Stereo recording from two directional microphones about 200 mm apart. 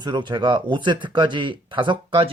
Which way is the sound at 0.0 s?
20° right (ahead or behind).